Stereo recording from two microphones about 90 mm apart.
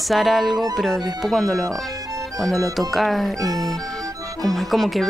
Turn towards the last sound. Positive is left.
turn(degrees=0)  # may be behind; listen again after turning